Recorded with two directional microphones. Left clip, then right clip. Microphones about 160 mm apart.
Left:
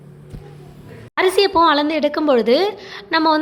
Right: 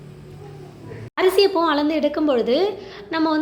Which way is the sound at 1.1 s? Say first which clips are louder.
Left 2 dB; 15° left (ahead or behind).